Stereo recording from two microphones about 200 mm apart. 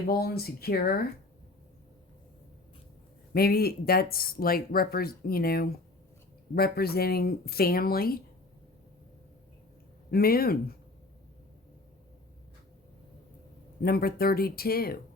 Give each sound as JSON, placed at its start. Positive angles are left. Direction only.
{"t": 0.1, "sound": "speech", "side_deg": 50}
{"t": 3.3, "sound": "speech", "side_deg": 50}
{"t": 10.1, "sound": "speech", "side_deg": 50}
{"t": 13.8, "sound": "speech", "side_deg": 50}